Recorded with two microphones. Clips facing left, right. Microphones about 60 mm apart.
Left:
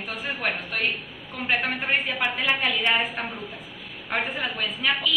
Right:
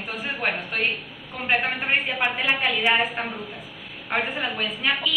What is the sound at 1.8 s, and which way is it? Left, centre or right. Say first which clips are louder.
A woman's voice: right 1 dB; centre.